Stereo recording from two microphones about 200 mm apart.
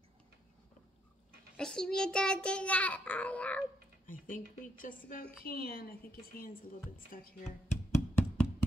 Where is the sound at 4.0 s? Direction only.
40° left (ahead or behind).